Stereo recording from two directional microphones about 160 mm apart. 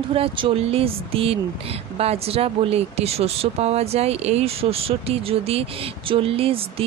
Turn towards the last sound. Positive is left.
turn(degrees=-35)  # may be behind; listen again after turning